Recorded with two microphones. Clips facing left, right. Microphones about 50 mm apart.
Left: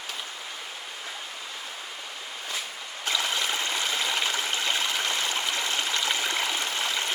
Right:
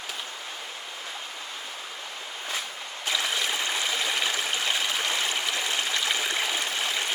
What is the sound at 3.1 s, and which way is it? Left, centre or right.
Stream, right.